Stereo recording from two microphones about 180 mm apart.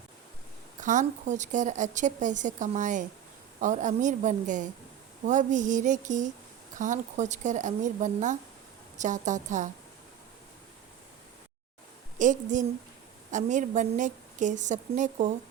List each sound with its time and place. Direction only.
0.8 s speech: 45° right (ahead or behind)
12.2 s speech: 45° right (ahead or behind)